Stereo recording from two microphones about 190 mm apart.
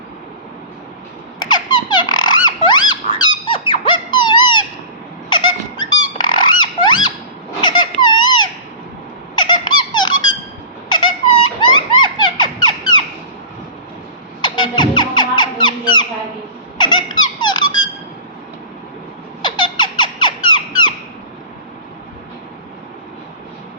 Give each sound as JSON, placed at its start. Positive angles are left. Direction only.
{"t": 1.5, "sound": "squeak", "side_deg": 25}
{"t": 7.6, "sound": "a sound", "side_deg": 25}
{"t": 9.3, "sound": "squeak", "side_deg": 25}
{"t": 14.4, "sound": "music", "side_deg": 25}
{"t": 16.7, "sound": "squeak", "side_deg": 25}
{"t": 19.4, "sound": "squeak", "side_deg": 25}